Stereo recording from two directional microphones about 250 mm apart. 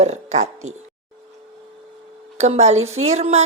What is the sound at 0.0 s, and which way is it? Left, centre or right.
Speech, right.